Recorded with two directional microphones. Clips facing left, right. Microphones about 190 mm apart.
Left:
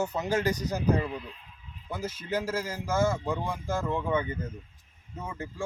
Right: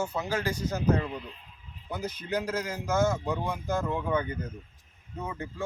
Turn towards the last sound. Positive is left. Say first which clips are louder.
# right 1 dB
turn(degrees=10)  # may be behind; listen again after turning